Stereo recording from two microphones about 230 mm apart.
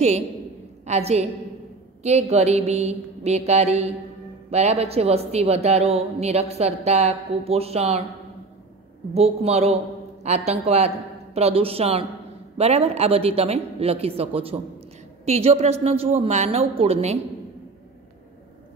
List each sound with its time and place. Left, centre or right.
0.8 s a woman's voice: right
9.1 s a woman's voice: right